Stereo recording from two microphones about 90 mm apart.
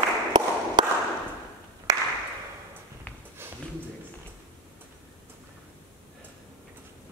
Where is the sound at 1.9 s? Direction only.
40° right (ahead or behind).